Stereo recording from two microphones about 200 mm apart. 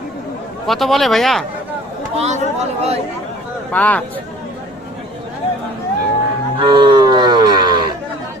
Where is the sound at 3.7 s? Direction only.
5° left (ahead or behind).